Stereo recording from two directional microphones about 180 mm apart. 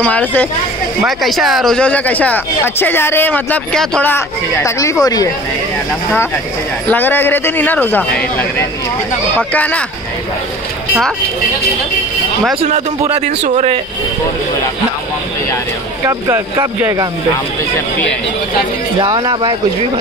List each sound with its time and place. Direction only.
0.0 s speech: 10° left (ahead or behind)
6.9 s speech: 10° left (ahead or behind)
13.4 s speech: 40° right (ahead or behind)
16.1 s speech: 15° right (ahead or behind)
18.9 s speech: 25° right (ahead or behind)